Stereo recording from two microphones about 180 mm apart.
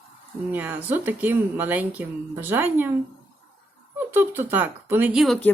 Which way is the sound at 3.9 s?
10° right (ahead or behind).